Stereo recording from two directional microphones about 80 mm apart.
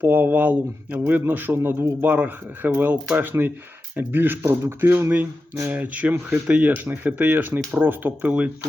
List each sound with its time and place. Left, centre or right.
0.0 s speech: right
5.7 s speech: centre